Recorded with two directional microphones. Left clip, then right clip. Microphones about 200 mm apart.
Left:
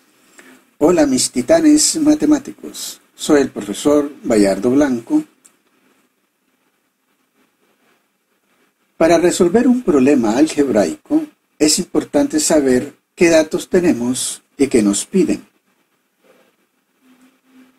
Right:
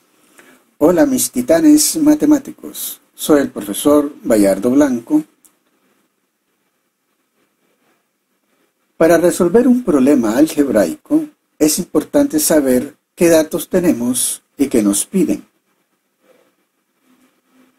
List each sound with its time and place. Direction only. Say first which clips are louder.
0.8 s speech: right 1 dB; 25° right (ahead or behind)
8.9 s speech: right 1 dB; 25° right (ahead or behind)